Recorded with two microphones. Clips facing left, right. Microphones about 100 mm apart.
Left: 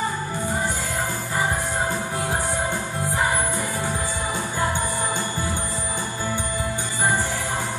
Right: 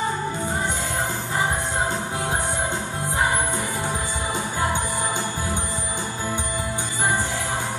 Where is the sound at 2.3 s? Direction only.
20° right (ahead or behind).